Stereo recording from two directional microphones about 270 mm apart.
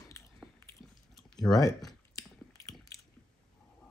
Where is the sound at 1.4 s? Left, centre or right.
Centre.